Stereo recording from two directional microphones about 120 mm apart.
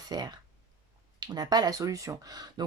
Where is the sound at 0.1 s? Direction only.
35° right (ahead or behind).